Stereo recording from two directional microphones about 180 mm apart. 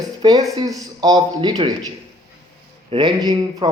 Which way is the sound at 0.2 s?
20° right (ahead or behind).